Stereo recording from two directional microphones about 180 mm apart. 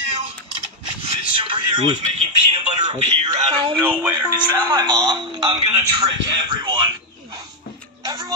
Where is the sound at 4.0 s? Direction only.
10° right (ahead or behind).